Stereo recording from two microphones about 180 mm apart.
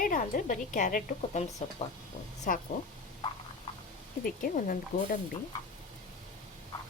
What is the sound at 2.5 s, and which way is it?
Speech, 50° left (ahead or behind).